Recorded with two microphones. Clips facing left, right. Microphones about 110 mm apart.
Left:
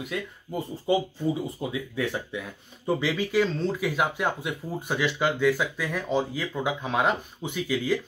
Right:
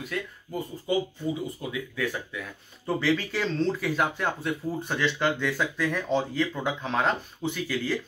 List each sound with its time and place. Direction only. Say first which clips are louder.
0.0 s speech: left 1 dB; 20° left (ahead or behind)
3.0 s speech: left 1 dB; 15° left (ahead or behind)